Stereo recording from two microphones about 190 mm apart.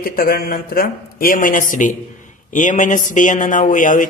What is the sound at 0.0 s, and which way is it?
A man's voice, 50° left (ahead or behind).